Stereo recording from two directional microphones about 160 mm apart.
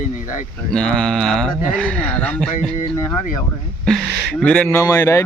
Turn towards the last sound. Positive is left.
turn(degrees=20)  # may be behind; listen again after turning